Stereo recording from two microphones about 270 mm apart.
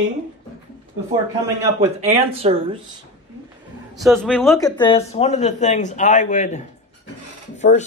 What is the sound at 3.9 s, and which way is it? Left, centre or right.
Speech, centre.